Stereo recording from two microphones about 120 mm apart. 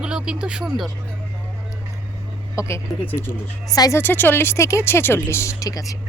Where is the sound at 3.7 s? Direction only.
30° left (ahead or behind).